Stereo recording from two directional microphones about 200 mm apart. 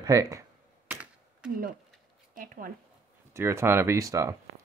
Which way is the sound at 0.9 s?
5° right (ahead or behind).